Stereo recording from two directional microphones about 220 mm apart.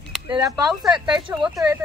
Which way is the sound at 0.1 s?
Centre (ahead or behind).